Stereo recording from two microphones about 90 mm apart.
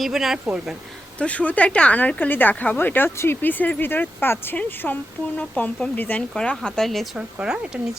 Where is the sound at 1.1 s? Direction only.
15° left (ahead or behind).